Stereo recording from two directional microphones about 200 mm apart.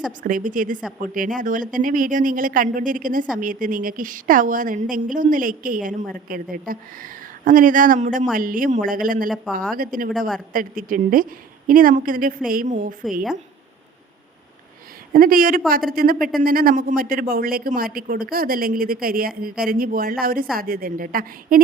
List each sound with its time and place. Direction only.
0.2 s a woman's voice: 40° right (ahead or behind)
15.1 s speech: 45° right (ahead or behind)